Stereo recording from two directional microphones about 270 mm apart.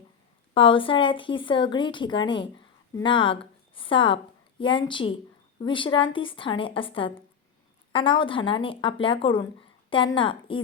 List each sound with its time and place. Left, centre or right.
0.5 s speech: centre